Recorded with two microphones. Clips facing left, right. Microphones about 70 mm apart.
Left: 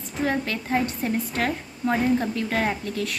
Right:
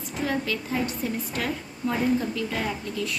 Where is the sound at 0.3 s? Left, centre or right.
Left.